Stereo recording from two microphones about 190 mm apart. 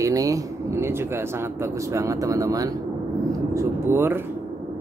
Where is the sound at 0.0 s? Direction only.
15° right (ahead or behind).